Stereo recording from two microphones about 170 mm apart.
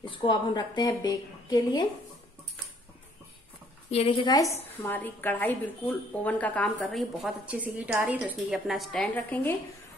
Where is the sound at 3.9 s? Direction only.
35° left (ahead or behind).